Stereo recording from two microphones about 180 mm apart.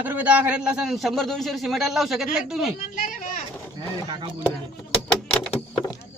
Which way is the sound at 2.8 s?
50° left (ahead or behind).